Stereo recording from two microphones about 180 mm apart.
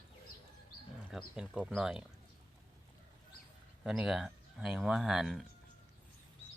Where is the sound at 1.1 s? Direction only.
5° right (ahead or behind).